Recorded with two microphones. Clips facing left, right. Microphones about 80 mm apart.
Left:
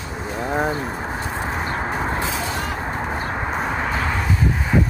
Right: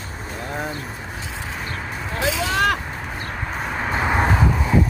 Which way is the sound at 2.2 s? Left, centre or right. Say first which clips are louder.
Right 3 dB; right.